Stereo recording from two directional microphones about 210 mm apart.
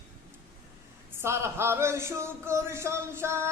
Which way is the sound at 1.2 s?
10° right (ahead or behind).